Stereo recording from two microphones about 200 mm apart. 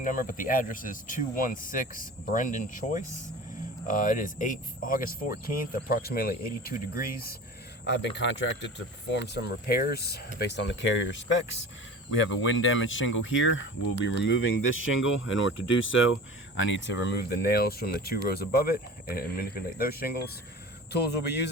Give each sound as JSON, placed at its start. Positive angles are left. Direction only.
{"t": 0.0, "sound": "speech", "side_deg": 40}
{"t": 7.9, "sound": "speech", "side_deg": 60}
{"t": 12.4, "sound": "speech", "side_deg": 75}
{"t": 16.6, "sound": "speech", "side_deg": 65}